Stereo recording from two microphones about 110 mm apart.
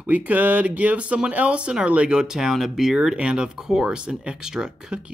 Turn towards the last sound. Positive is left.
turn(degrees=-5)  # may be behind; listen again after turning